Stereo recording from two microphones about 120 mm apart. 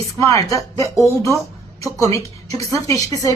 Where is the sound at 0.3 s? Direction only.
25° left (ahead or behind).